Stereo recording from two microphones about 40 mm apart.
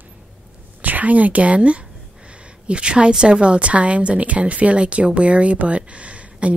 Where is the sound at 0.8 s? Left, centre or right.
Right.